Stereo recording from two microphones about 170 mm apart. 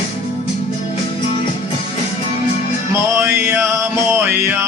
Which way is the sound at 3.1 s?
15° right (ahead or behind).